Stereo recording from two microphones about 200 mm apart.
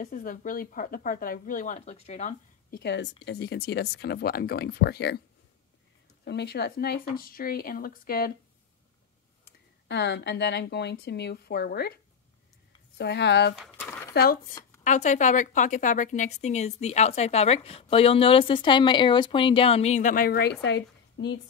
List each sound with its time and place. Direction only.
0.0 s a woman's voice: 45° left (ahead or behind)
2.7 s speech: 60° left (ahead or behind)
6.2 s speech: 55° left (ahead or behind)
9.4 s speech: 60° left (ahead or behind)
13.7 s a sound: 10° left (ahead or behind)
14.1 s speech: 50° left (ahead or behind)
14.8 s a woman's voice: 35° left (ahead or behind); by 21.4 s 60° left (ahead or behind)